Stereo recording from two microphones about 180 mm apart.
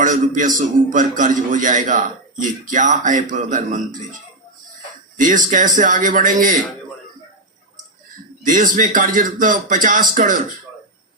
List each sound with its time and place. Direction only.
0.0 s a man's voice: 45° right (ahead or behind)
5.1 s a man's voice: 45° right (ahead or behind)
8.4 s a man's voice: 50° right (ahead or behind)